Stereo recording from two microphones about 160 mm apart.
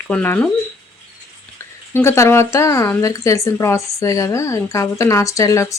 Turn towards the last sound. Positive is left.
turn(degrees=20)  # may be behind; listen again after turning